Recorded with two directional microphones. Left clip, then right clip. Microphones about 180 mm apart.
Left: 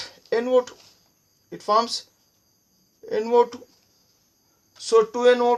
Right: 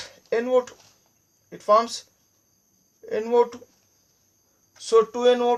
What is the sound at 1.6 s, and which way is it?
Speech, 30° left (ahead or behind).